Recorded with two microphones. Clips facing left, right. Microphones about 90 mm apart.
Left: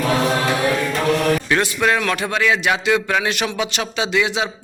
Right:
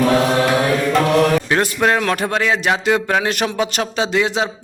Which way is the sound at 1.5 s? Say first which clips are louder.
Right 2 dB; 40° right (ahead or behind).